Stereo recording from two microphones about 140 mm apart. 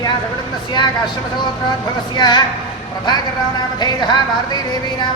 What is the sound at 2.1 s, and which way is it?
Speech, 30° left (ahead or behind).